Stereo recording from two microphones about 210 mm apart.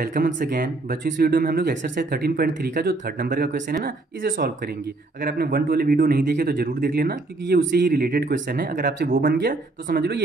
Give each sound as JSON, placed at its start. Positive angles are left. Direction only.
{"t": 0.0, "sound": "speech", "side_deg": -40}